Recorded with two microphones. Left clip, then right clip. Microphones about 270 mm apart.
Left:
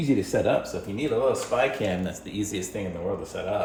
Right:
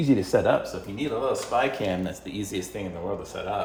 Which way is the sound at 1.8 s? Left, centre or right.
Centre.